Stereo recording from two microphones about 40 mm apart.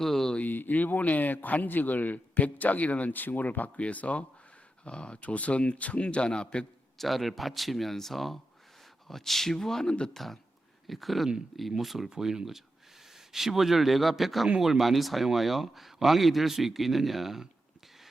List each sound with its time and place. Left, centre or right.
0.0 s a sound: centre
0.4 s speech: left
3.1 s speech: left
3.8 s speech: left
7.0 s speech: centre